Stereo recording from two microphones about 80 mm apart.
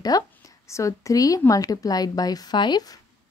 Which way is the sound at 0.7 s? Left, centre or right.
Left.